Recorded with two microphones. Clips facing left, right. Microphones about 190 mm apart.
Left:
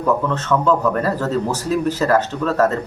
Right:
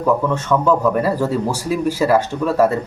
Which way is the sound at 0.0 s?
10° right (ahead or behind).